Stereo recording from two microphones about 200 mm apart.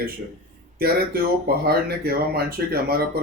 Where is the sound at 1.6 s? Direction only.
50° right (ahead or behind).